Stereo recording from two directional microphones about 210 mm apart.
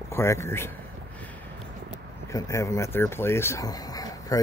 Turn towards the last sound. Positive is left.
turn(degrees=15)  # may be behind; listen again after turning